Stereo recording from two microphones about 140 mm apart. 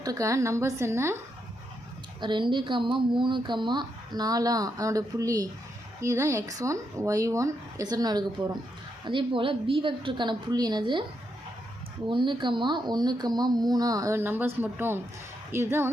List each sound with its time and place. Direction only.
0.0 s speech: 25° right (ahead or behind)
2.2 s speech: 35° right (ahead or behind)
12.0 s speech: 35° right (ahead or behind); by 15.9 s 15° right (ahead or behind)